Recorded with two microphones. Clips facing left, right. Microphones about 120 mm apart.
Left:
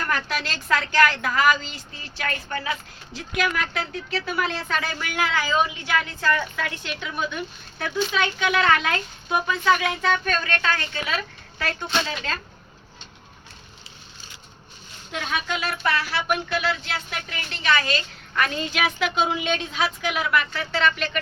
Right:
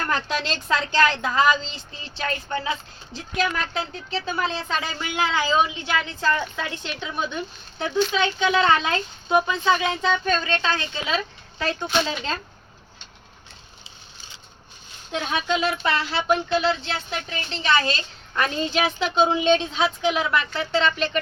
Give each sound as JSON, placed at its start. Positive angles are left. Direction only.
{"t": 0.1, "sound": "speech", "side_deg": -20}
{"t": 15.1, "sound": "speech", "side_deg": -25}